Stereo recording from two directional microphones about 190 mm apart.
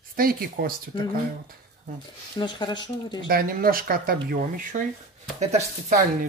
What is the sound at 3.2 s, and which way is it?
Speech, 50° right (ahead or behind).